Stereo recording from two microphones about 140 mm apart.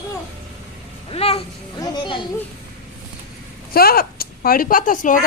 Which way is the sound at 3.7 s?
90° left.